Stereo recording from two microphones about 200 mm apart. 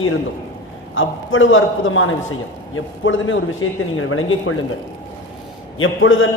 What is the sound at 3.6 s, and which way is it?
Speech, 90° left.